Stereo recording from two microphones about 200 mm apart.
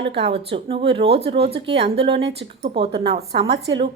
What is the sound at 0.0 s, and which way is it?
Speech, 60° right (ahead or behind).